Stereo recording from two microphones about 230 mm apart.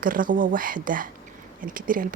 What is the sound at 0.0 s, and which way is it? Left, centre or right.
Speech, right.